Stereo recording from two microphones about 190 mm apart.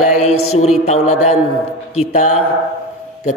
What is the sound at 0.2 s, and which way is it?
Speech, 35° left (ahead or behind).